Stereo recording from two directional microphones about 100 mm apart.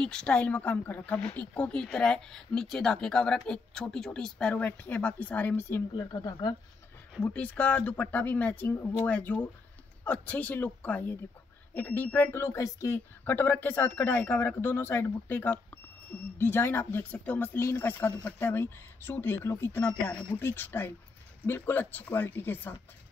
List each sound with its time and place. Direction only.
0.0 s speech: 10° left (ahead or behind)
5.9 s speech: 45° left (ahead or behind)
7.2 s speech: 15° left (ahead or behind); by 13.0 s 30° left (ahead or behind)
13.2 s speech: 20° left (ahead or behind)